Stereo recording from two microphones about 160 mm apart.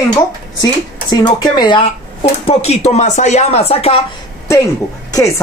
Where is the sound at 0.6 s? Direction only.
25° left (ahead or behind).